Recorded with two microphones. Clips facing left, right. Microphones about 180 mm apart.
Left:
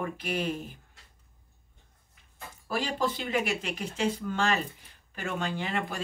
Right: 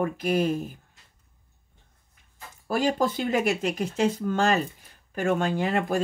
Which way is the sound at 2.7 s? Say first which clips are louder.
Right 6 dB; 45° right (ahead or behind).